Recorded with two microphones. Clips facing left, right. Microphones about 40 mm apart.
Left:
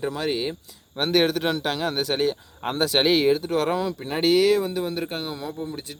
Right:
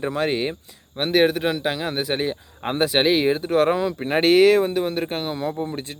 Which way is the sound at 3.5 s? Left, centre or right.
Right.